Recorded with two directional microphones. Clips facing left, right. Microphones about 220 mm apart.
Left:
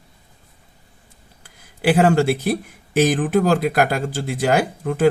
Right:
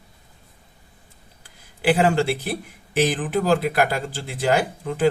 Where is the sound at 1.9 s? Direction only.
50° left (ahead or behind).